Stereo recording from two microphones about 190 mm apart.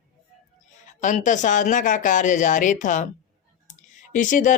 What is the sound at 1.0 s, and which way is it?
Speech, 40° left (ahead or behind).